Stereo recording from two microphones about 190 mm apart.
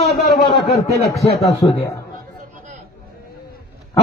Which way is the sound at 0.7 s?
35° left (ahead or behind).